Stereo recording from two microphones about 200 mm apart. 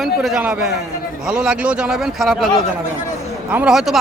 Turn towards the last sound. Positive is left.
turn(degrees=0)  # may be behind; listen again after turning